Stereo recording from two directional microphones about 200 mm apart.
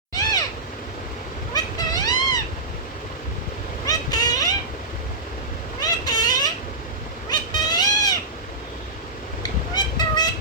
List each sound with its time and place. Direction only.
0.1 s cat: 20° left (ahead or behind)
1.5 s a sound: 20° left (ahead or behind)
3.8 s vehicle: 20° left (ahead or behind)
5.8 s vehicle: 20° left (ahead or behind)
7.3 s cat: 20° left (ahead or behind)
9.4 s cat: 20° left (ahead or behind)